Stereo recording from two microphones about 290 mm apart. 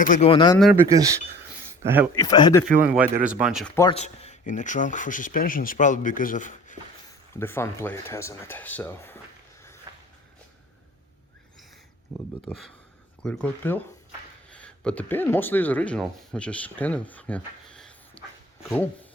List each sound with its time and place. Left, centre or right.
0.0 s speech: left
0.6 s speech: centre
2.1 s speech: centre
2.8 s speech: centre
3.8 s speech: centre
7.3 s speech: centre
9.9 s a sound: centre
13.2 s speech: centre